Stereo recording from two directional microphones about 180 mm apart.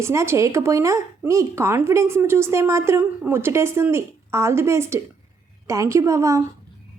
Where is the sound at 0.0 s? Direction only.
15° right (ahead or behind).